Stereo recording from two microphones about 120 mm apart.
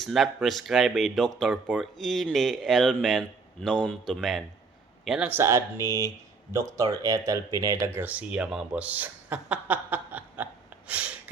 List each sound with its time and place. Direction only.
0.0 s speech: centre (ahead or behind)
1.6 s speech: 10° right (ahead or behind)
2.0 s speech: centre (ahead or behind)
5.3 s speech: 20° right (ahead or behind)
6.7 s speech: 30° right (ahead or behind); by 11.1 s 10° right (ahead or behind)